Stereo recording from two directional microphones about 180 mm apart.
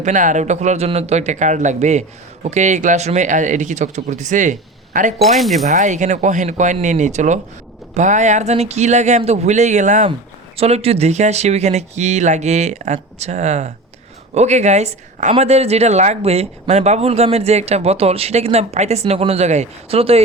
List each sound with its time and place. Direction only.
0.0 s speech: 45° right (ahead or behind)
5.2 s speech: centre (ahead or behind)
5.6 s speech: 40° right (ahead or behind)